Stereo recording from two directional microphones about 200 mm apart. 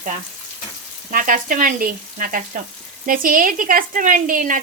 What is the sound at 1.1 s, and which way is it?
A woman's voice, 45° right (ahead or behind).